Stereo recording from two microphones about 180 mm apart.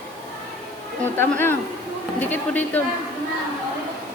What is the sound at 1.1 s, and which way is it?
A woman's voice, 10° left (ahead or behind).